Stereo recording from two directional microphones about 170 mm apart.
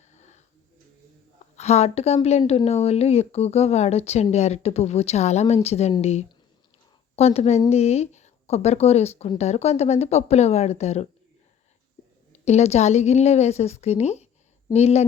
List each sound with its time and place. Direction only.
0.1 s a sound: 45° left (ahead or behind)
1.5 s speech: 40° left (ahead or behind)
12.3 s speech: 40° left (ahead or behind)